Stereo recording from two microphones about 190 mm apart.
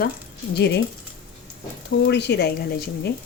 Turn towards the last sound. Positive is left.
turn(degrees=55)  # may be behind; listen again after turning